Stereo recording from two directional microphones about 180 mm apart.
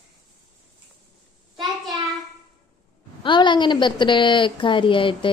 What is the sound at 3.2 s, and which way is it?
A woman's voice, 25° left (ahead or behind).